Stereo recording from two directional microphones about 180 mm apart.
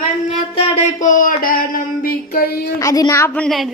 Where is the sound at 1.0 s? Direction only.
45° left (ahead or behind).